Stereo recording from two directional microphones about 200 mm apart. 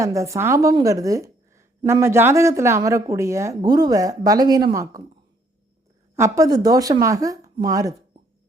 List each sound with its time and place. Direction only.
0.0 s a woman's voice: 15° right (ahead or behind)
6.1 s a woman's voice: 15° right (ahead or behind)